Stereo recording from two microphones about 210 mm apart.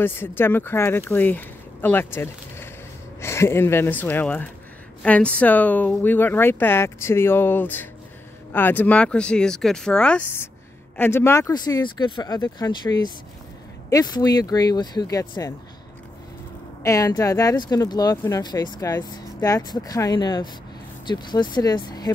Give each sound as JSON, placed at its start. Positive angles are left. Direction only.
{"t": 0.0, "sound": "speech", "side_deg": 10}
{"t": 16.8, "sound": "speech", "side_deg": 15}